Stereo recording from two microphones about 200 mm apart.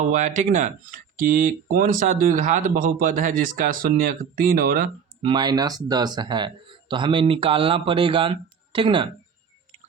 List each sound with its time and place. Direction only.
0.1 s speech: 40° right (ahead or behind)
5.2 s speech: 25° right (ahead or behind)